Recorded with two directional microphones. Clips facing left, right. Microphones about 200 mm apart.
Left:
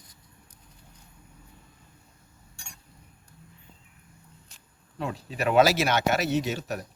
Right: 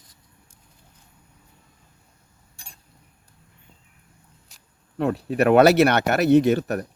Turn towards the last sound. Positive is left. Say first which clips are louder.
# right 10 dB
turn(degrees=-55)  # may be behind; listen again after turning